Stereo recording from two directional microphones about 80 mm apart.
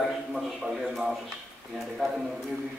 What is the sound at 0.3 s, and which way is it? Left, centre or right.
Speech, centre.